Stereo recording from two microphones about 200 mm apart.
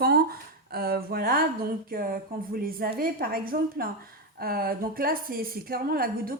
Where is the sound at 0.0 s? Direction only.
50° right (ahead or behind).